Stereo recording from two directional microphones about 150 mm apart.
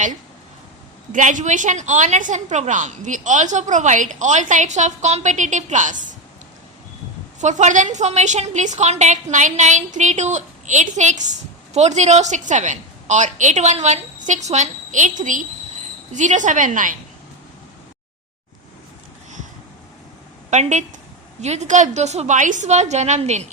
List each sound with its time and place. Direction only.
1.1 s a woman's voice: 60° right (ahead or behind)
7.4 s a woman's voice: 55° right (ahead or behind)
20.5 s a woman's voice: 50° right (ahead or behind)